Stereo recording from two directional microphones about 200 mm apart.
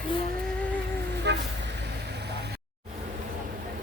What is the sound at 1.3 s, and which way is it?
Speech, 60° right (ahead or behind).